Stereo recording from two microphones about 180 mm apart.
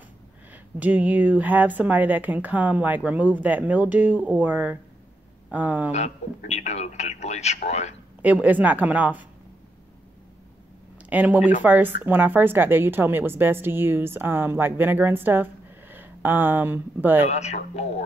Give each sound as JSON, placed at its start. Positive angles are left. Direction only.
{"t": 0.5, "sound": "a woman's voice", "side_deg": -10}
{"t": 5.9, "sound": "a man's voice", "side_deg": 40}
{"t": 8.2, "sound": "a woman's voice", "side_deg": -10}
{"t": 11.0, "sound": "a woman's voice", "side_deg": -10}
{"t": 17.3, "sound": "a man's voice", "side_deg": 40}